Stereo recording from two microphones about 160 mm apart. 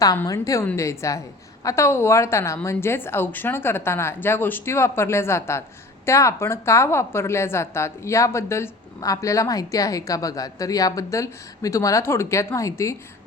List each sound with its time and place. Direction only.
0.3 s a woman's voice: 20° left (ahead or behind)